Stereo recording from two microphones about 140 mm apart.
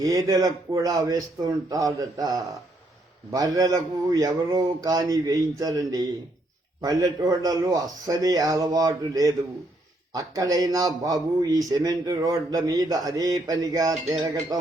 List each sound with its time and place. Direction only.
0.0 s a man's voice: 25° right (ahead or behind)